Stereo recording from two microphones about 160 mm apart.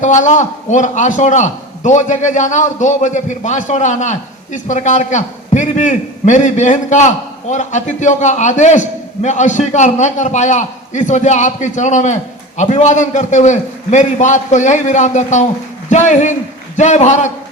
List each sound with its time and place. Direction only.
0.0 s a man's voice: 50° left (ahead or behind)